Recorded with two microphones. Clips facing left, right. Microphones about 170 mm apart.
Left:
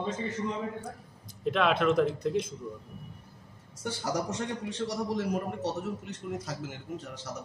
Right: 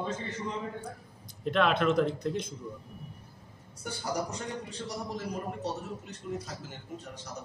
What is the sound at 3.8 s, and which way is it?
A man's voice, 85° left.